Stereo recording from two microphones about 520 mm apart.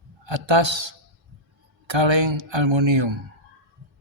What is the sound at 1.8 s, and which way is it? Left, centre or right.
Speech, right.